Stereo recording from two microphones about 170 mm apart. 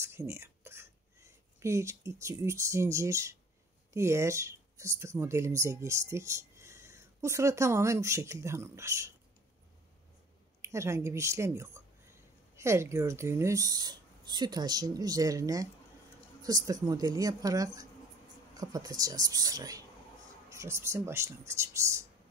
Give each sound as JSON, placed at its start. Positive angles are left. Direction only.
{"t": 0.0, "sound": "speech", "side_deg": -15}
{"t": 10.6, "sound": "a woman's voice", "side_deg": -15}